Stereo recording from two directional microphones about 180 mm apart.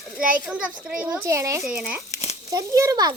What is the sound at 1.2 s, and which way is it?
A child's voice, 15° right (ahead or behind).